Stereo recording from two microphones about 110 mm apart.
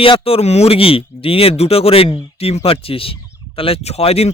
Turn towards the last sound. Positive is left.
turn(degrees=65)  # may be behind; listen again after turning